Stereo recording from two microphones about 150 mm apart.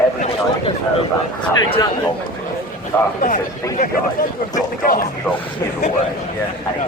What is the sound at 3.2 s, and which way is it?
Speech, 60° left (ahead or behind).